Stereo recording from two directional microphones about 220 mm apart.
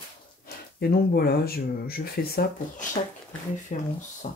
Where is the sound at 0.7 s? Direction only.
45° left (ahead or behind).